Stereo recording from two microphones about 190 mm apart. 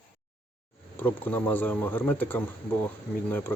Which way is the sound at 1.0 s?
10° left (ahead or behind).